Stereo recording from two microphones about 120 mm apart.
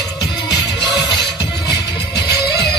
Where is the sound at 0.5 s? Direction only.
35° left (ahead or behind).